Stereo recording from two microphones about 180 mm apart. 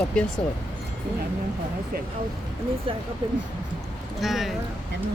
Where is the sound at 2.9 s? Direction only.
30° right (ahead or behind).